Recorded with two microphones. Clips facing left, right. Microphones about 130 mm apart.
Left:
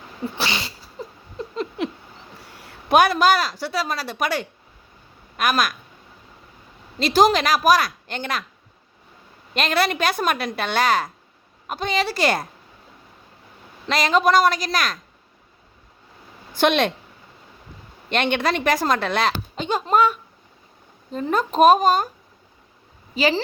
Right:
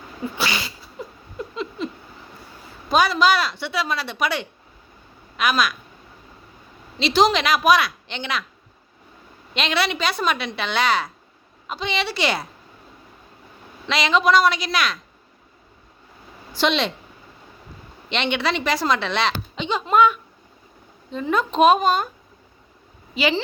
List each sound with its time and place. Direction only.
0.4 s cat: 25° left (ahead or behind)
1.0 s patter: 35° left (ahead or behind)
1.8 s a sound: 70° left (ahead or behind)
2.5 s a woman's voice: 70° left (ahead or behind); by 5.7 s 45° left (ahead or behind)
7.0 s a woman's voice: 45° left (ahead or behind)
9.6 s a woman's voice: 45° left (ahead or behind)
13.8 s a woman's voice: 45° left (ahead or behind)
16.5 s a woman's voice: 55° left (ahead or behind)
18.1 s a woman's voice: 50° left (ahead or behind)
19.9 s a woman's voice: 35° left (ahead or behind)
23.1 s a woman's voice: 40° left (ahead or behind)